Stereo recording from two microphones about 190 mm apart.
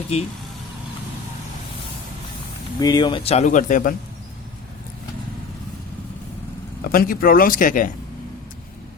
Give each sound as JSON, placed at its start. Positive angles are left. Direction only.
{"t": 0.1, "sound": "speech", "side_deg": 35}
{"t": 2.8, "sound": "speech", "side_deg": 20}
{"t": 6.9, "sound": "speech", "side_deg": 50}